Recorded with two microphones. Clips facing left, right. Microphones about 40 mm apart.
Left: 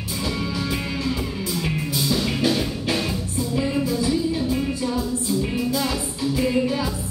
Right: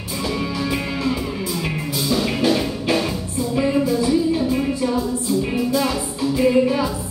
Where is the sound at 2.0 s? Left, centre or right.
Centre.